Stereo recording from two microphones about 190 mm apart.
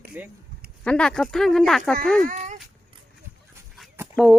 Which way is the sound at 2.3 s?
40° right (ahead or behind).